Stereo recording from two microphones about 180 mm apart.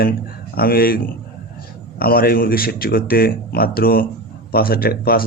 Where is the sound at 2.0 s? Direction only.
55° left (ahead or behind).